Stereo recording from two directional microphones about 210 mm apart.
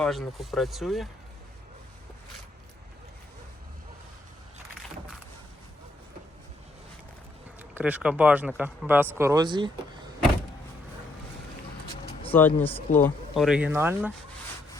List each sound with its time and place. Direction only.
0.0 s speech: centre (ahead or behind)
7.6 s speech: 10° right (ahead or behind)
11.9 s a sound: 25° left (ahead or behind)
12.3 s speech: 10° left (ahead or behind); by 14.1 s 10° right (ahead or behind)